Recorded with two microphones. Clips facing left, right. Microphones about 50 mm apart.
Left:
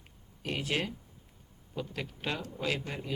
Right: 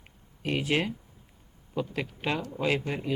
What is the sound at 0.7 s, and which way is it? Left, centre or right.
Speech, right.